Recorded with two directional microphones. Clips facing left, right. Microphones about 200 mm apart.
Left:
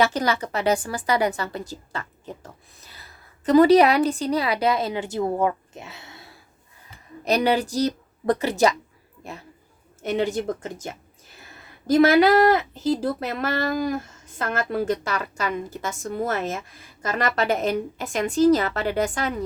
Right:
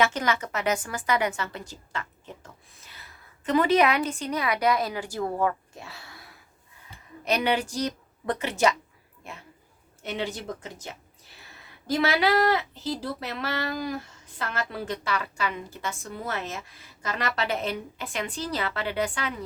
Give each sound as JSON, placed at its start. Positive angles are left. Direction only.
{"t": 0.0, "sound": "a woman's voice", "side_deg": 35}
{"t": 7.3, "sound": "a woman's voice", "side_deg": 35}
{"t": 10.0, "sound": "speech", "side_deg": 45}